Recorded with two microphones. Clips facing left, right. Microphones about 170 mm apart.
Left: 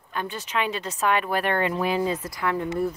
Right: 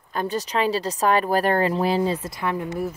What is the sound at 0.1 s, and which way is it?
Speech, 40° right (ahead or behind).